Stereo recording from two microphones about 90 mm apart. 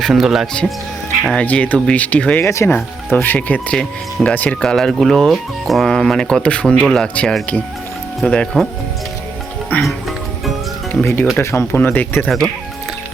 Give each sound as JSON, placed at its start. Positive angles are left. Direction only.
{"t": 0.0, "sound": "speech", "side_deg": 0}
{"t": 1.5, "sound": "speech", "side_deg": 20}
{"t": 2.4, "sound": "speech", "side_deg": 35}
{"t": 3.1, "sound": "speech", "side_deg": 20}
{"t": 3.8, "sound": "speech", "side_deg": 5}
{"t": 9.7, "sound": "speech", "side_deg": 20}
{"t": 11.0, "sound": "speech", "side_deg": 20}